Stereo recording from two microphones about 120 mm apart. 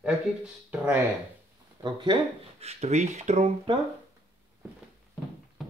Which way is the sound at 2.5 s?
65° right (ahead or behind).